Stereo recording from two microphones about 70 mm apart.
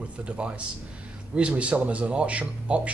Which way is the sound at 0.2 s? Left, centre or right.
Centre.